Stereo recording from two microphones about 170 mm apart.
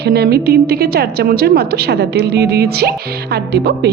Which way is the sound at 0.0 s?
70° right (ahead or behind).